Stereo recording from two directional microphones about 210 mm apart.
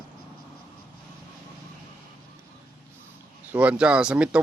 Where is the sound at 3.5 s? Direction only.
5° right (ahead or behind).